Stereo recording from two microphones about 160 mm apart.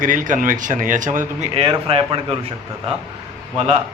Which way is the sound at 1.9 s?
35° right (ahead or behind).